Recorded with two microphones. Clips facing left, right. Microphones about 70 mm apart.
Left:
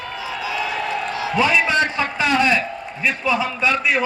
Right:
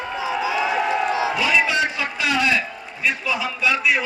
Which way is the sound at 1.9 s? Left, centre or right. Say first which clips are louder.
Left 4 dB; left.